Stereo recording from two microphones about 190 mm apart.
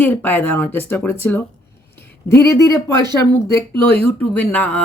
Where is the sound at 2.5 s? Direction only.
15° left (ahead or behind).